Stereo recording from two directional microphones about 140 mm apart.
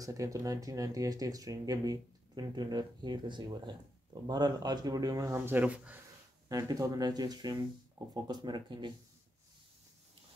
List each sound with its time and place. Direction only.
0.0 s speech: 25° right (ahead or behind)
6.5 s speech: 25° right (ahead or behind)